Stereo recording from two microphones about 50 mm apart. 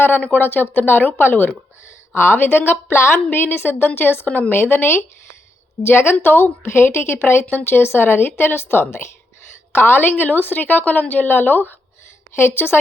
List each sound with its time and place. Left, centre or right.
0.3 s speech: left
9.7 s a woman's voice: left